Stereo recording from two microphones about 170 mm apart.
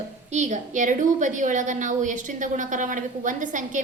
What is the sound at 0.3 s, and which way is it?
A woman's voice, 45° right (ahead or behind).